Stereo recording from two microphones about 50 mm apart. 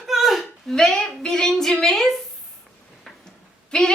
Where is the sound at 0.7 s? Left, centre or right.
Centre.